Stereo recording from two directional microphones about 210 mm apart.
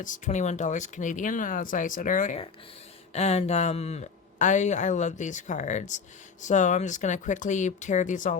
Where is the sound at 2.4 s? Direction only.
25° left (ahead or behind).